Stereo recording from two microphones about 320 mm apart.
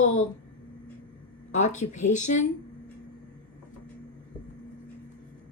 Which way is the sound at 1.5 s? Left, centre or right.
Left.